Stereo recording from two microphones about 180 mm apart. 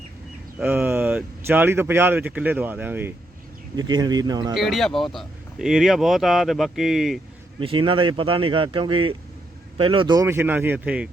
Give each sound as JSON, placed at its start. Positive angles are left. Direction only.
{"t": 0.6, "sound": "speech", "side_deg": -10}
{"t": 3.8, "sound": "speech", "side_deg": -20}
{"t": 4.5, "sound": "speech", "side_deg": 0}
{"t": 7.6, "sound": "speech", "side_deg": -30}